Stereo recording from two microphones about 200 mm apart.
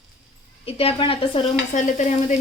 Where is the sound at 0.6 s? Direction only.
30° left (ahead or behind).